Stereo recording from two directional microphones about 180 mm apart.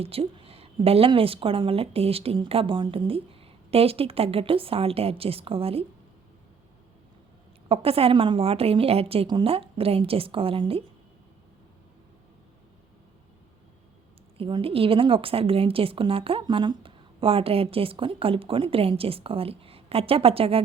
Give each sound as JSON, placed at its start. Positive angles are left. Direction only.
{"t": 0.0, "sound": "a woman's voice", "side_deg": -30}
{"t": 7.7, "sound": "a woman's voice", "side_deg": -30}
{"t": 14.3, "sound": "a woman's voice", "side_deg": -30}